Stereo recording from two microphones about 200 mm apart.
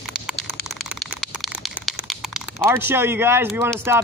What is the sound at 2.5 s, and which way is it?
Speech, 10° right (ahead or behind).